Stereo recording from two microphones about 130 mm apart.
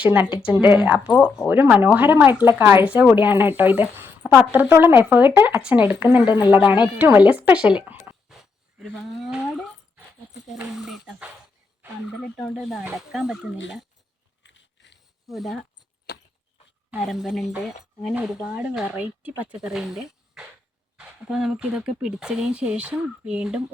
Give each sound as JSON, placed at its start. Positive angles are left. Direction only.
{"t": 0.0, "sound": "speech", "side_deg": -15}
{"t": 0.3, "sound": "speech", "side_deg": 35}
{"t": 1.5, "sound": "speech", "side_deg": -15}
{"t": 6.2, "sound": "speech", "side_deg": 35}
{"t": 6.5, "sound": "speech", "side_deg": -15}
{"t": 7.9, "sound": "a sound", "side_deg": -5}
{"t": 8.8, "sound": "speech", "side_deg": -5}
{"t": 13.0, "sound": "speech", "side_deg": -5}
{"t": 15.3, "sound": "speech", "side_deg": 0}
{"t": 17.1, "sound": "speech", "side_deg": 0}